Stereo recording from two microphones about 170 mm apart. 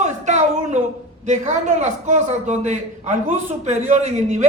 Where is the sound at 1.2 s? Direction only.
45° right (ahead or behind).